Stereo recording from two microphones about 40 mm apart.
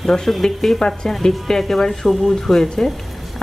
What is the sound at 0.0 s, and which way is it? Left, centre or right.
Speech, centre.